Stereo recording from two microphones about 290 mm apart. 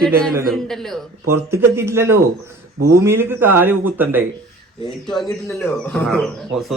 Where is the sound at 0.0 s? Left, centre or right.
Centre.